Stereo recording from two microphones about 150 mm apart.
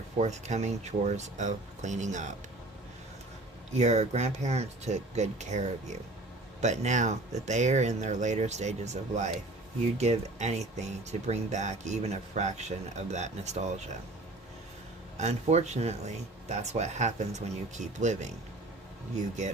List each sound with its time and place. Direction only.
0.2 s speech: 50° right (ahead or behind)
3.7 s speech: 45° right (ahead or behind)
15.2 s speech: 45° right (ahead or behind)